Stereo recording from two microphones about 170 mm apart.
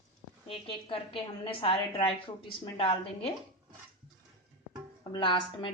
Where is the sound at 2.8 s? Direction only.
35° left (ahead or behind).